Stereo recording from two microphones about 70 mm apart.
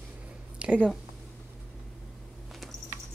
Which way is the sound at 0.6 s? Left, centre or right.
Right.